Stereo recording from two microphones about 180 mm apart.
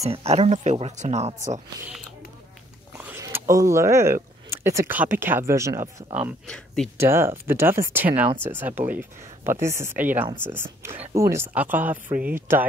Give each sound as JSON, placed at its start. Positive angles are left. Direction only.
{"t": 0.0, "sound": "speech", "side_deg": -35}
{"t": 3.0, "sound": "speech", "side_deg": -15}
{"t": 6.4, "sound": "speech", "side_deg": 5}
{"t": 7.0, "sound": "speech", "side_deg": -15}